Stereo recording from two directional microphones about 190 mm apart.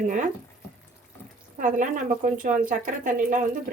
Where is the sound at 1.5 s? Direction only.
40° right (ahead or behind).